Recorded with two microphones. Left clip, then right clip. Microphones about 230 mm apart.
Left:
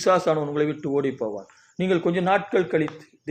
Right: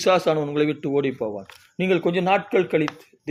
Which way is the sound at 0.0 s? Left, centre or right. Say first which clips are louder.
Right 1 dB; right.